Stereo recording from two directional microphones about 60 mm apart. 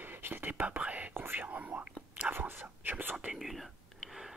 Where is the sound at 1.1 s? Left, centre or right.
Right.